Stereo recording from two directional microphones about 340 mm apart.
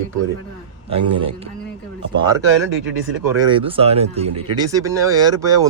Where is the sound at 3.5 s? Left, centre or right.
Centre.